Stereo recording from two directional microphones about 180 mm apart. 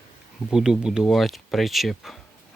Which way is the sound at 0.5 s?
5° right (ahead or behind).